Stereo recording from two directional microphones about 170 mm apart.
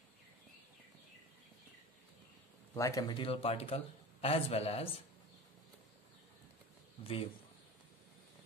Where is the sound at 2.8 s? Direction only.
20° left (ahead or behind).